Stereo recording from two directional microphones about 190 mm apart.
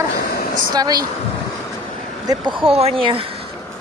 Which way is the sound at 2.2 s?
30° right (ahead or behind).